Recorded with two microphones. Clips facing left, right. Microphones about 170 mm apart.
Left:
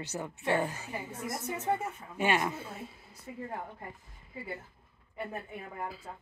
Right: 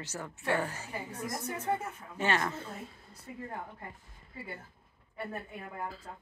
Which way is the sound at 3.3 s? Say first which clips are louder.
Left 2 dB; 20° left (ahead or behind).